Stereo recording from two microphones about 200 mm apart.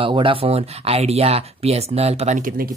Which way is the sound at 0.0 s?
25° right (ahead or behind).